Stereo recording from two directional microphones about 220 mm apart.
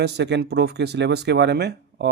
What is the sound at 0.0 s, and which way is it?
Speech, 50° right (ahead or behind).